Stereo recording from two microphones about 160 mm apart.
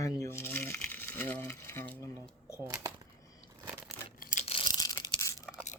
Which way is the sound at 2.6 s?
20° right (ahead or behind).